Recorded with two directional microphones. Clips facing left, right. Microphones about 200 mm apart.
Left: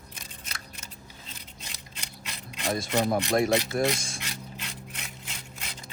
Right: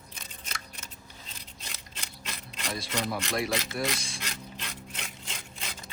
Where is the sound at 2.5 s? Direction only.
50° left (ahead or behind).